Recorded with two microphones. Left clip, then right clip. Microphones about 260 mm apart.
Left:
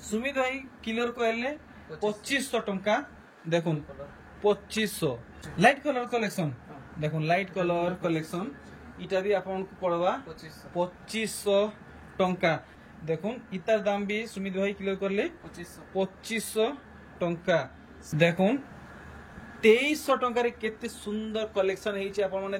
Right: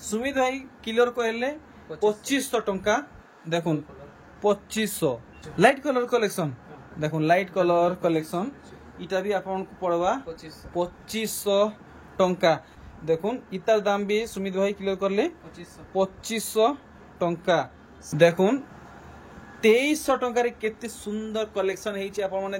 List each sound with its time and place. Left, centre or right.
0.1 s speech: centre
19.6 s speech: centre